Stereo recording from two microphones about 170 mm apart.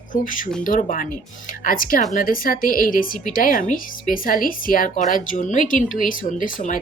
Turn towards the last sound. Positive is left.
turn(degrees=45)  # may be behind; listen again after turning